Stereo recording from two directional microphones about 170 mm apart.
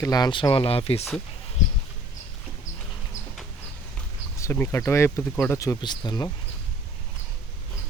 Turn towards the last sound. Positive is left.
turn(degrees=25)  # may be behind; listen again after turning